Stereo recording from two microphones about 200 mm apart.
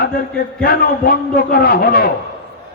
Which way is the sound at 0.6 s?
50° left (ahead or behind).